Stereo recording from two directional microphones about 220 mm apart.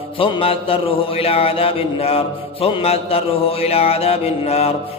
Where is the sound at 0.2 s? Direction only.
25° left (ahead or behind).